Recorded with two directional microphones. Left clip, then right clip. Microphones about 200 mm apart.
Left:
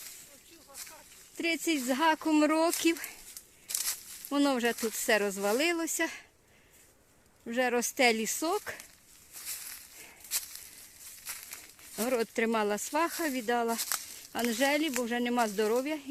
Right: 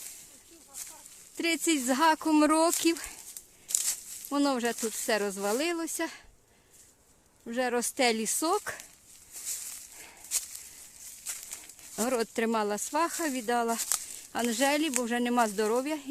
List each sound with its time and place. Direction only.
1.4 s speech: 15° right (ahead or behind); by 6.2 s centre (ahead or behind)
7.4 s speech: centre (ahead or behind)
10.3 s a sound: centre (ahead or behind)
11.3 s speech: 5° right (ahead or behind)